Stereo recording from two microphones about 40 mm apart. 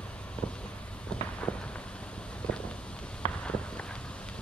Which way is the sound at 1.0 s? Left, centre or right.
Left.